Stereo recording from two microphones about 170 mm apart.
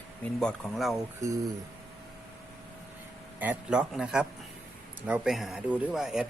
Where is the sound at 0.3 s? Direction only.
Centre (ahead or behind).